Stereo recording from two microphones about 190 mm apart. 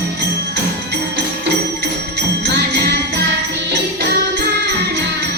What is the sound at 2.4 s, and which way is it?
Music, 60° right (ahead or behind).